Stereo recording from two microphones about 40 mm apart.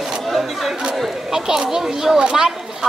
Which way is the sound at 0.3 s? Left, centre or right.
Centre.